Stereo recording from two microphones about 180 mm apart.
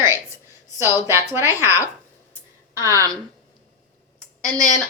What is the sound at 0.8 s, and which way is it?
Speech, 15° right (ahead or behind).